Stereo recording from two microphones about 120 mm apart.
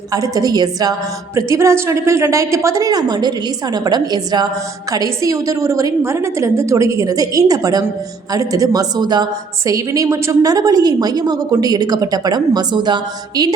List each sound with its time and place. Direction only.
0.1 s a woman's voice: 30° right (ahead or behind)